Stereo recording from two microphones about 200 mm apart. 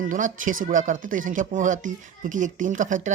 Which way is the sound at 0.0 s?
40° right (ahead or behind).